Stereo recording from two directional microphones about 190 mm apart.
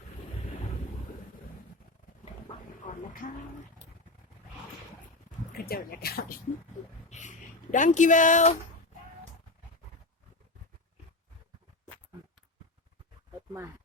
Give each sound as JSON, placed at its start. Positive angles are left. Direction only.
{"t": 2.8, "sound": "speech", "side_deg": 45}
{"t": 5.5, "sound": "speech", "side_deg": 50}
{"t": 7.1, "sound": "speech", "side_deg": 40}